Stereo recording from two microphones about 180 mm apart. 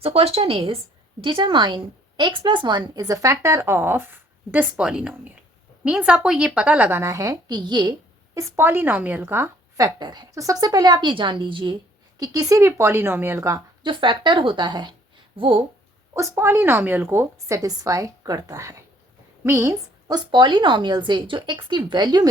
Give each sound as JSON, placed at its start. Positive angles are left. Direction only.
{"t": 0.0, "sound": "a woman's voice", "side_deg": -35}
{"t": 16.1, "sound": "a woman's voice", "side_deg": -15}